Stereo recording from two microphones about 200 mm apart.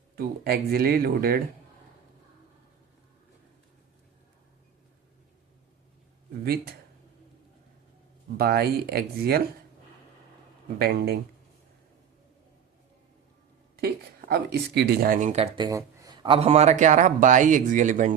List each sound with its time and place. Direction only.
0.2 s speech: 50° right (ahead or behind)
6.4 s speech: 50° right (ahead or behind)
8.4 s speech: 50° right (ahead or behind)
10.8 s speech: 50° right (ahead or behind)
13.8 s speech: 50° right (ahead or behind)
15.5 s a man's voice: 20° right (ahead or behind); by 18.1 s 40° right (ahead or behind)